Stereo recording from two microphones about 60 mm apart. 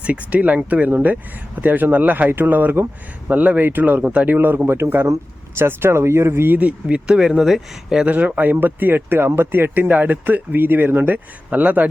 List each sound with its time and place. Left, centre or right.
0.0 s speech: right
6.5 s speech: right
6.8 s speech: centre
8.0 s speech: right